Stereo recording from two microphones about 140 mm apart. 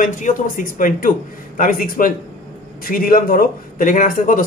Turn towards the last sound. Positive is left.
turn(degrees=75)  # may be behind; listen again after turning